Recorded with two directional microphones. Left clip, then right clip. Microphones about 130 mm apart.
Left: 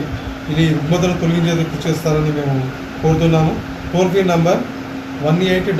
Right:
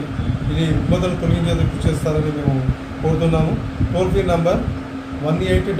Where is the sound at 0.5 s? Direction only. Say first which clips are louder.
Left 4 dB; 20° right (ahead or behind).